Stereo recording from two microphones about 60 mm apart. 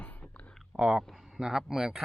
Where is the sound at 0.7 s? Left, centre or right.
Centre.